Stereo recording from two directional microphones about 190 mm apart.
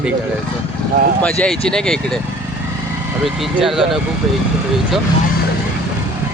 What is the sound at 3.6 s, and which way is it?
Speech, centre (ahead or behind).